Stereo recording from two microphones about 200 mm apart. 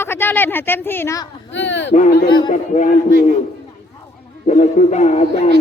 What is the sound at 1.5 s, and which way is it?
Speech, 60° left (ahead or behind).